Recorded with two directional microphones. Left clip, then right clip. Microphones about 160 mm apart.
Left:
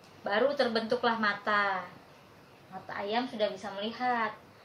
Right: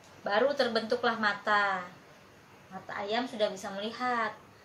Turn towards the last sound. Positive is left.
turn(degrees=5)  # may be behind; listen again after turning